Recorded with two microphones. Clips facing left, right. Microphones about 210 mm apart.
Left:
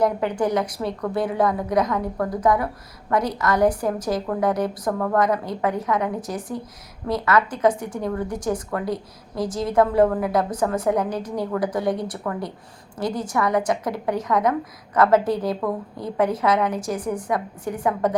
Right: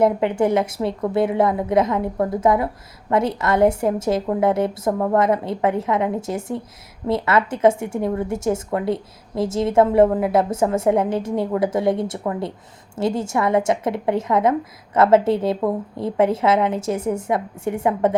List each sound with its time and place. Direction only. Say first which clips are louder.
0.0 s a woman's voice: right 4 dB; 25° right (ahead or behind)